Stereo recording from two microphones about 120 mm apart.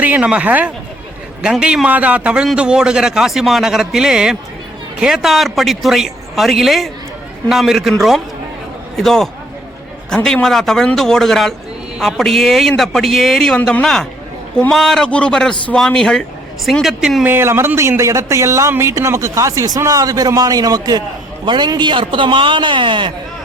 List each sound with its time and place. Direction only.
0.0 s a man's voice: 15° right (ahead or behind)
17.2 s a man's voice: 20° right (ahead or behind); by 23.1 s 45° right (ahead or behind)